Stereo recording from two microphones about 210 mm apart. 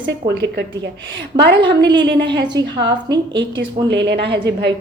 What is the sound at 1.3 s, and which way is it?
A woman's voice, 20° right (ahead or behind).